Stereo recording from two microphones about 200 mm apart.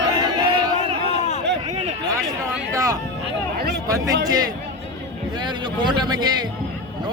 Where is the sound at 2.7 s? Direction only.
15° right (ahead or behind).